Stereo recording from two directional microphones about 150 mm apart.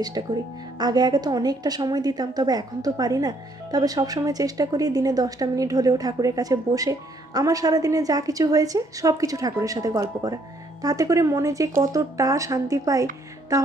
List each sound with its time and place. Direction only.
0.2 s a woman's voice: 30° right (ahead or behind)